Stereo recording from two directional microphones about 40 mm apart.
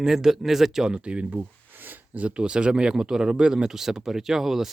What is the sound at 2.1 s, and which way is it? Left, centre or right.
Speech, right.